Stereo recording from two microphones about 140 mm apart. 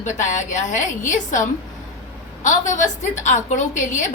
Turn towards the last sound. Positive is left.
turn(degrees=60)  # may be behind; listen again after turning